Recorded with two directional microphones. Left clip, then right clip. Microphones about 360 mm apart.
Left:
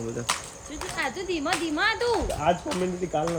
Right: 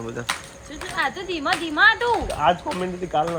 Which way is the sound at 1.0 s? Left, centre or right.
Centre.